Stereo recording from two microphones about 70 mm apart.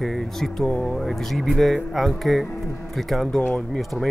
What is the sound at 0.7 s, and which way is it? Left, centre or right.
Speech, centre.